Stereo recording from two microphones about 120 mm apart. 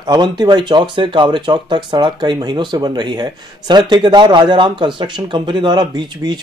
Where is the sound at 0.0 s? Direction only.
40° right (ahead or behind).